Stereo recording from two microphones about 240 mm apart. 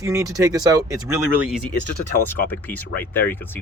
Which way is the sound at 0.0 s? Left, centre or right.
Centre.